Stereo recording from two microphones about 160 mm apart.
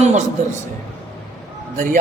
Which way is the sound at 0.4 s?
45° right (ahead or behind).